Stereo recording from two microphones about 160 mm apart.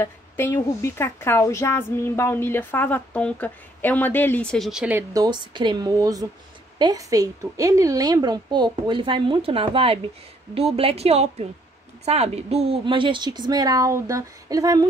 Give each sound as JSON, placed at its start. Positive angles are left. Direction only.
{"t": 0.0, "sound": "speech", "side_deg": 15}
{"t": 5.1, "sound": "a woman's voice", "side_deg": -25}